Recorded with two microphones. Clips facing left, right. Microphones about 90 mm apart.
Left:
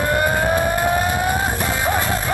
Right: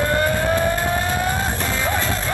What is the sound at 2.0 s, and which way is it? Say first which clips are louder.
Music: left 2 dB; 15° left (ahead or behind).